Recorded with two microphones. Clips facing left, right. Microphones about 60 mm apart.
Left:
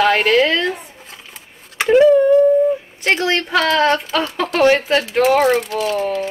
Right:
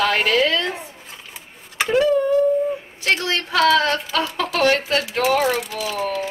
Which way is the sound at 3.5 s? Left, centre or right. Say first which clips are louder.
Even; left.